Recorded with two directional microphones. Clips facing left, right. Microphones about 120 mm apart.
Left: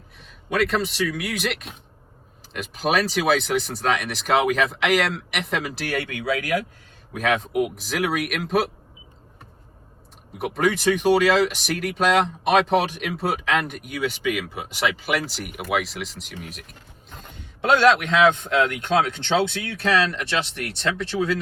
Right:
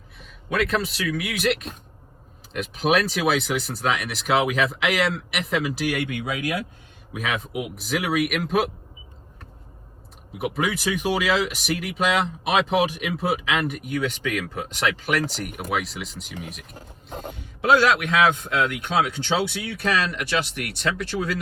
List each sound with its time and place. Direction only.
0.2 s speech: centre (ahead or behind); by 6.6 s 20° right (ahead or behind)
7.1 s speech: 5° right (ahead or behind)
10.3 s speech: centre (ahead or behind)
16.7 s speech: 40° right (ahead or behind)
17.7 s speech: 5° right (ahead or behind)